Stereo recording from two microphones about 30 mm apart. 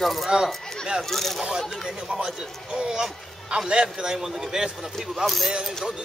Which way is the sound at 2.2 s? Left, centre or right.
Centre.